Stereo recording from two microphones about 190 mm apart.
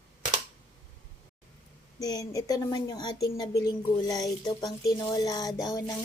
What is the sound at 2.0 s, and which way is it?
Speech, 20° left (ahead or behind).